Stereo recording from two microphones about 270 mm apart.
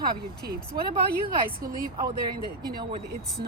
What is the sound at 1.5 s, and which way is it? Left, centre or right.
Speech, right.